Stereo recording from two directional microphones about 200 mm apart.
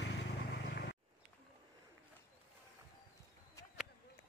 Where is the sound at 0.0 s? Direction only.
60° left (ahead or behind).